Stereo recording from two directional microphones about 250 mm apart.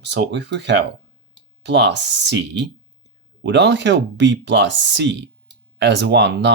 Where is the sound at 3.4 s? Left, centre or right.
Right.